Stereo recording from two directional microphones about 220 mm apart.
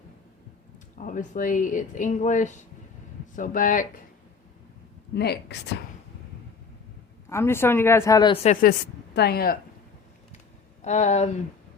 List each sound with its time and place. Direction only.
0.9 s speech: 35° left (ahead or behind)
5.1 s a woman's voice: 50° left (ahead or behind)
7.3 s a woman's voice: 10° left (ahead or behind)
9.1 s a woman's voice: 45° left (ahead or behind)
10.8 s speech: 30° left (ahead or behind)